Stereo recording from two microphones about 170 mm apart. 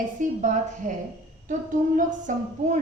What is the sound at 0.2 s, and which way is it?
Speech, 45° right (ahead or behind).